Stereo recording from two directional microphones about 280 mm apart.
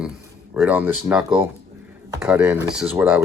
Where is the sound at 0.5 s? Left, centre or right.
Centre.